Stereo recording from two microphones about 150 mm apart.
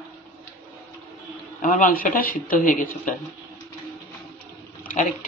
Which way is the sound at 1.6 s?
70° left (ahead or behind).